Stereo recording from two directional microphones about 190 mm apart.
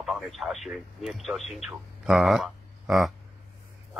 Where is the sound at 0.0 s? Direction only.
Centre (ahead or behind).